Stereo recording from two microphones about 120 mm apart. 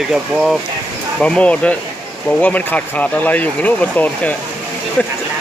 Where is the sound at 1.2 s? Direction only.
10° left (ahead or behind).